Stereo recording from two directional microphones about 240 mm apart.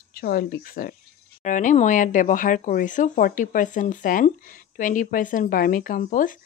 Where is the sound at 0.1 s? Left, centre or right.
Left.